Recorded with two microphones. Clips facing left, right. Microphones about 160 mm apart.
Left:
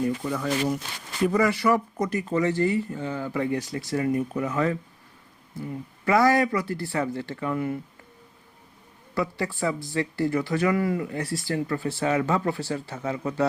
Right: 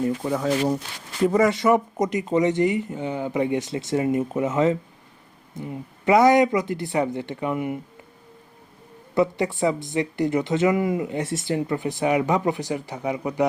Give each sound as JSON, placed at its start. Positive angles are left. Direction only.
{"t": 0.0, "sound": "speech", "side_deg": -20}
{"t": 9.1, "sound": "speech", "side_deg": -20}